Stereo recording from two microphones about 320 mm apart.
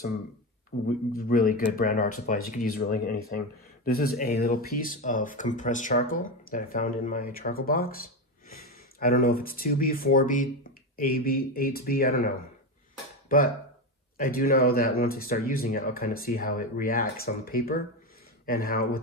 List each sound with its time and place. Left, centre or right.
0.7 s speech: left
14.1 s speech: left